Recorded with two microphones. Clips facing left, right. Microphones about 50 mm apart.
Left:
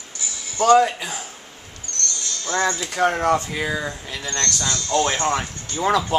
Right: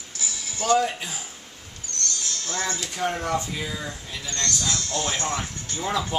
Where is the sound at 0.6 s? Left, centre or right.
Left.